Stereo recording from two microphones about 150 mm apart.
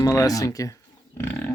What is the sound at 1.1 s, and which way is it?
Livestock, 15° left (ahead or behind).